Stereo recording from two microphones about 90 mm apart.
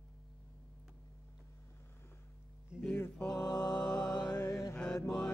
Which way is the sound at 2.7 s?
10° right (ahead or behind).